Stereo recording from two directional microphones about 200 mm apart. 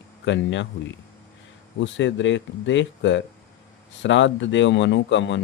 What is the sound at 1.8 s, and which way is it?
Speech, 65° left (ahead or behind).